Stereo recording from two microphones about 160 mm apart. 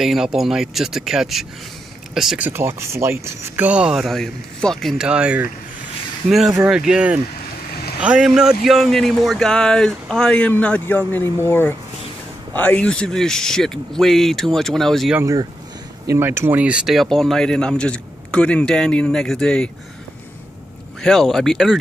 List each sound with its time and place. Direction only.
0.0 s speech: 5° right (ahead or behind)
15.1 s speech: 20° right (ahead or behind); by 19.7 s 5° left (ahead or behind)
21.0 s speech: centre (ahead or behind)